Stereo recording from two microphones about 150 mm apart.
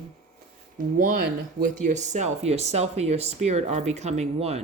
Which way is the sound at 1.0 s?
70° right (ahead or behind).